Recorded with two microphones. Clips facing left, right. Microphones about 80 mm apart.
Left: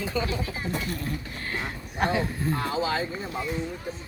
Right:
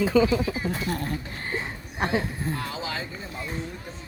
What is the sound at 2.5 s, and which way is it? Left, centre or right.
Speech, left.